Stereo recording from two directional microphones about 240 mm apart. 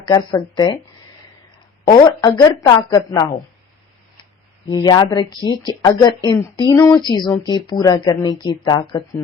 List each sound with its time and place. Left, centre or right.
0.1 s speech: centre
1.9 s speech: centre
4.7 s speech: centre